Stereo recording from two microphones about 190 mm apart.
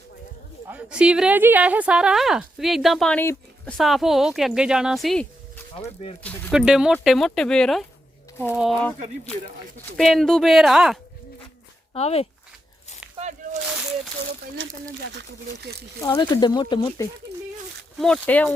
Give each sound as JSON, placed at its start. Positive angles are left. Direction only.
{"t": 0.7, "sound": "a woman's voice", "side_deg": -5}
{"t": 5.7, "sound": "speech", "side_deg": 30}
{"t": 6.5, "sound": "a woman's voice", "side_deg": -5}
{"t": 10.0, "sound": "a woman's voice", "side_deg": 0}
{"t": 11.9, "sound": "speech", "side_deg": 35}
{"t": 13.1, "sound": "a sound", "side_deg": -35}
{"t": 13.7, "sound": "a sound", "side_deg": -5}
{"t": 16.0, "sound": "speech", "side_deg": 15}
{"t": 17.9, "sound": "a woman's voice", "side_deg": 5}